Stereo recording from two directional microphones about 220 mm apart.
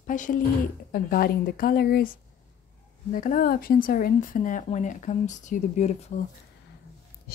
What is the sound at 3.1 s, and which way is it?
Speech, 35° left (ahead or behind).